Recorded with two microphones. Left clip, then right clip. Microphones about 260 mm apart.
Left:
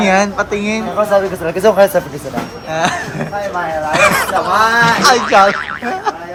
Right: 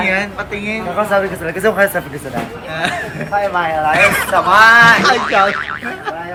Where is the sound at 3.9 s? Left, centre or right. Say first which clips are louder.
Left 1 dB; centre.